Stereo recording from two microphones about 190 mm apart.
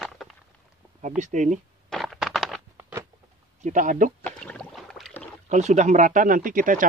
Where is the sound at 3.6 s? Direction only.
45° right (ahead or behind).